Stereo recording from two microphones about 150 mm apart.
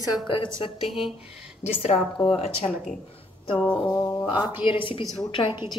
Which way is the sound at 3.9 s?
15° left (ahead or behind).